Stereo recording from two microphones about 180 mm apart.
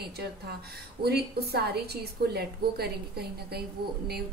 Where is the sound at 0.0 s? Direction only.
60° right (ahead or behind).